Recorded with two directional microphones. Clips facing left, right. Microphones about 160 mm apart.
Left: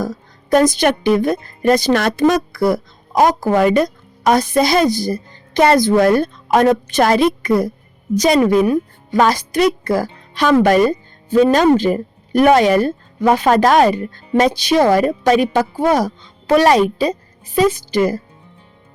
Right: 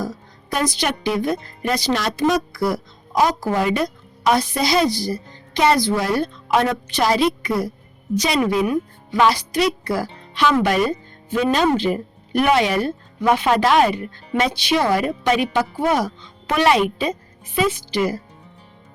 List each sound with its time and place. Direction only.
0.5 s a woman's voice: 50° left (ahead or behind)